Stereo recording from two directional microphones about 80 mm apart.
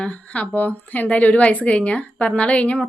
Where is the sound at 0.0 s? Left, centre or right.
Centre.